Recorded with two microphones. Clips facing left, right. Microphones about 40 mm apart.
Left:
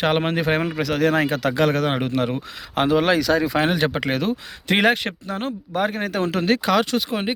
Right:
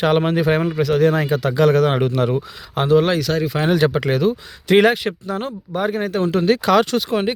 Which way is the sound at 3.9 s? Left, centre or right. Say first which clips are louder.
Right 4 dB; left.